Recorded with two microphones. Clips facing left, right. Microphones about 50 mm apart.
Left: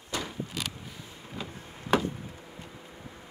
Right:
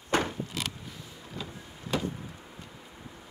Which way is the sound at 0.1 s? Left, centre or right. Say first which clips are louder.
Right 7 dB; right.